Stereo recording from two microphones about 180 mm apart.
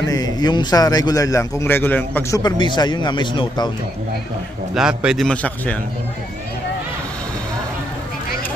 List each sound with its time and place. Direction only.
0.0 s a man's voice: 20° left (ahead or behind)
2.4 s a man's voice: 25° left (ahead or behind)
4.7 s a man's voice: 5° right (ahead or behind)